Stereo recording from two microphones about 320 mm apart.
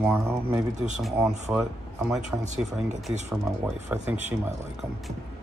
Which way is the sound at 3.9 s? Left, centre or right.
Centre.